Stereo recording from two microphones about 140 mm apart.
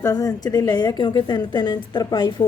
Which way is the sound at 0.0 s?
25° left (ahead or behind).